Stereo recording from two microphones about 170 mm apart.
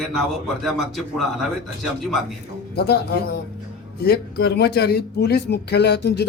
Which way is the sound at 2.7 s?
70° left (ahead or behind).